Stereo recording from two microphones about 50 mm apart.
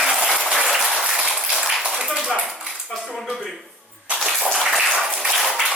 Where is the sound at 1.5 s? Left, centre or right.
Centre.